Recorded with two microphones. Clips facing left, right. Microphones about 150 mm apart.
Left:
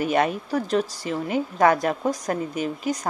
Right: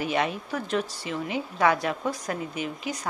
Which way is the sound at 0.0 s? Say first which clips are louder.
Left 5 dB; 45° left (ahead or behind).